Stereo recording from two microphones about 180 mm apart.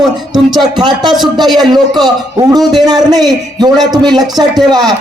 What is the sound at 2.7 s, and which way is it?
A man's voice, 20° right (ahead or behind).